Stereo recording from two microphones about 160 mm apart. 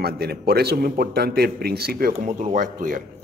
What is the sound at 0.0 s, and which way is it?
A man's voice, 80° right.